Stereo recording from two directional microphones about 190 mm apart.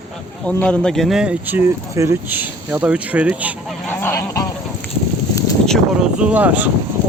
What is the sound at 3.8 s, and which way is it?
Goose, 10° left (ahead or behind).